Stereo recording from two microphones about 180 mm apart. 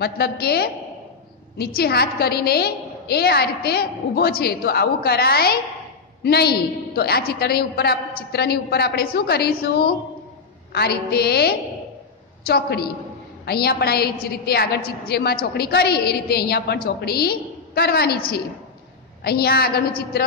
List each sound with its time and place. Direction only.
0.0 s a woman's voice: 60° left (ahead or behind)